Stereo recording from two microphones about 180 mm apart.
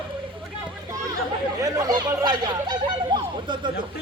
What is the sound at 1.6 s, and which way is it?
Speech, 20° right (ahead or behind).